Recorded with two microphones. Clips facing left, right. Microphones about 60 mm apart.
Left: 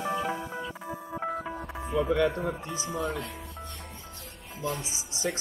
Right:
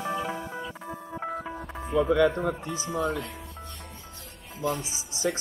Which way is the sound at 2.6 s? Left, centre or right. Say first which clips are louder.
Right 1 dB; left.